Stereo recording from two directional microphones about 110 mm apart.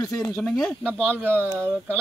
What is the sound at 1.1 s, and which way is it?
Speech, 20° right (ahead or behind).